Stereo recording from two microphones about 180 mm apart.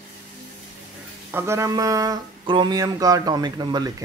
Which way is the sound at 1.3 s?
15° right (ahead or behind).